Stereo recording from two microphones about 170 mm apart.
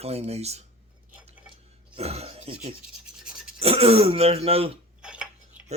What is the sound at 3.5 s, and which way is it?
Speech, 35° right (ahead or behind).